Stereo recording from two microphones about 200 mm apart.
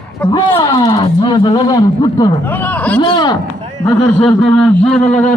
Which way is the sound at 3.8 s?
10° left (ahead or behind).